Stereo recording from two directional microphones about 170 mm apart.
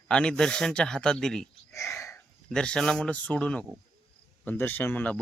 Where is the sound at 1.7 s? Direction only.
15° left (ahead or behind).